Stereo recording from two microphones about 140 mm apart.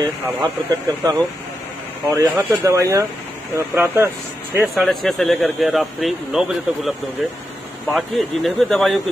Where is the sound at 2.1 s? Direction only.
20° right (ahead or behind).